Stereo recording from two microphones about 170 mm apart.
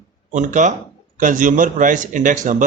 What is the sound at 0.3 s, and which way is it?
Speech, 45° right (ahead or behind).